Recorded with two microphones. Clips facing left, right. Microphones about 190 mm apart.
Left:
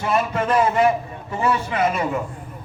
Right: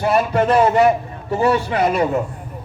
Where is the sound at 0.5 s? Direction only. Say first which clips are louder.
Right 3 dB; 35° right (ahead or behind).